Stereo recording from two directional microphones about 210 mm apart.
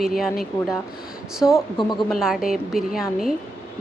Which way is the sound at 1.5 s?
20° left (ahead or behind).